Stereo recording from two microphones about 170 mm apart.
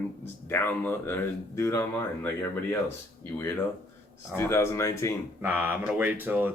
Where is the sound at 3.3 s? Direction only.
10° left (ahead or behind).